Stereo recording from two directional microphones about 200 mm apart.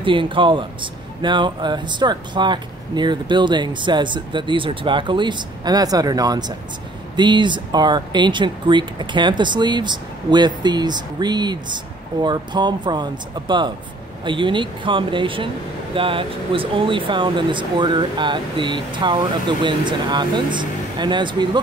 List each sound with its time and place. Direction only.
0.0 s speech: 25° right (ahead or behind)